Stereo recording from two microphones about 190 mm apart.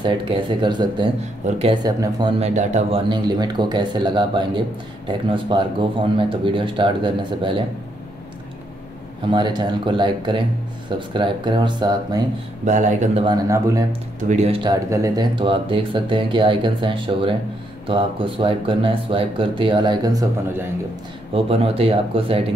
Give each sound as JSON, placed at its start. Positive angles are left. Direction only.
{"t": 0.0, "sound": "speech", "side_deg": -25}
{"t": 1.8, "sound": "speech", "side_deg": -20}
{"t": 2.4, "sound": "speech", "side_deg": -35}
{"t": 3.1, "sound": "speech", "side_deg": -20}
{"t": 9.3, "sound": "speech", "side_deg": -25}
{"t": 12.6, "sound": "speech", "side_deg": -40}
{"t": 13.2, "sound": "speech", "side_deg": -20}
{"t": 14.2, "sound": "speech", "side_deg": -35}
{"t": 21.3, "sound": "speech", "side_deg": -30}